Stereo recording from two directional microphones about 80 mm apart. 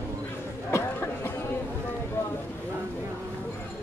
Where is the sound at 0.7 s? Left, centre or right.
Left.